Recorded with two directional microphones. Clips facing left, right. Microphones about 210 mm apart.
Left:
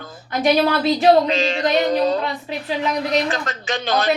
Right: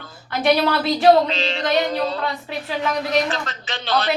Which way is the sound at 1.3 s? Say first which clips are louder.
Left 4 dB; 45° left (ahead or behind).